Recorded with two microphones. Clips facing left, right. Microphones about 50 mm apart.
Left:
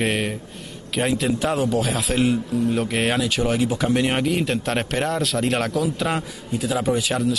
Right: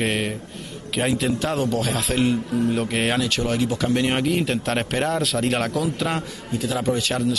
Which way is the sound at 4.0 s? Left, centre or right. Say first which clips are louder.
Even; centre.